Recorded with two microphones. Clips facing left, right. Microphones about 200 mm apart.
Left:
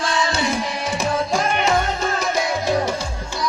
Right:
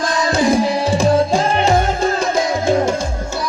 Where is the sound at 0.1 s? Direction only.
45° right (ahead or behind).